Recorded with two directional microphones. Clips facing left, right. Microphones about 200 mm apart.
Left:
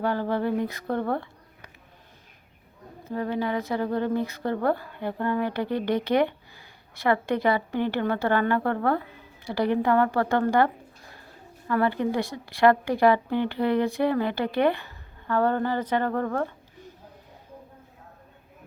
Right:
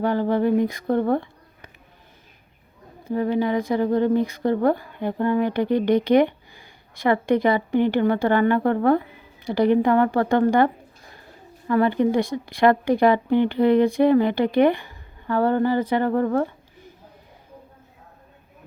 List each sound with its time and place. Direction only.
0.0 s speech: 15° right (ahead or behind)
3.0 s speech: 15° right (ahead or behind)
11.7 s speech: 20° right (ahead or behind)